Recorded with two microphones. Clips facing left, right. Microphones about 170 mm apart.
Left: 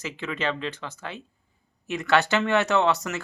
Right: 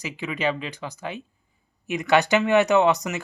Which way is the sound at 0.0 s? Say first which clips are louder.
Right 3 dB; 15° right (ahead or behind).